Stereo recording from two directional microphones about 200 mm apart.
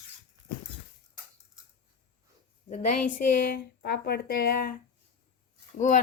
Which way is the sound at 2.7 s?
40° left (ahead or behind).